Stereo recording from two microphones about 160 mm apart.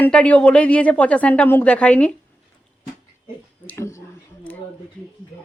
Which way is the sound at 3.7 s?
15° left (ahead or behind).